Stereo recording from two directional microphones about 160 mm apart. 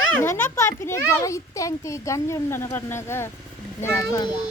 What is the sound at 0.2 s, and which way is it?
A child's voice, 15° left (ahead or behind).